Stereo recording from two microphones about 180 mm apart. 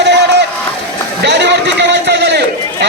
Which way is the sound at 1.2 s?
70° right (ahead or behind).